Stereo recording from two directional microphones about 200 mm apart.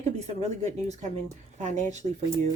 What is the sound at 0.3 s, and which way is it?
A woman's voice, 35° right (ahead or behind).